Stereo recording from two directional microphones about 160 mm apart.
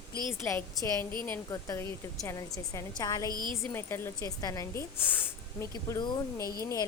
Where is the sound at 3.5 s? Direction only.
15° left (ahead or behind).